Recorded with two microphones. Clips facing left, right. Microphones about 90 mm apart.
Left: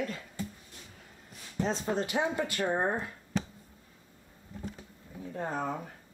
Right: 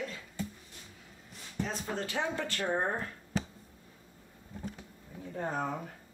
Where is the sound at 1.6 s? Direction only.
20° left (ahead or behind).